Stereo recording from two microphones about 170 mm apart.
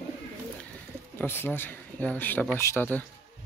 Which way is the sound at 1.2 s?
10° left (ahead or behind).